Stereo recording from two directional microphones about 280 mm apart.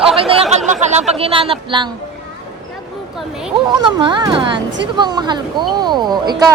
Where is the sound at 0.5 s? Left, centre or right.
Right.